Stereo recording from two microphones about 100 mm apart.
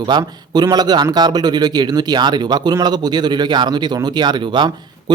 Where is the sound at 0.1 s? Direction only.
45° right (ahead or behind).